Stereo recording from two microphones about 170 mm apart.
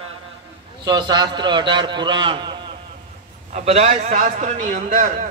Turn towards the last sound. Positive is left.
turn(degrees=-50)  # may be behind; listen again after turning